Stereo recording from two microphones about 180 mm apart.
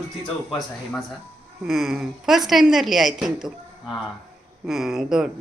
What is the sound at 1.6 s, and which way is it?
A woman's voice, centre (ahead or behind).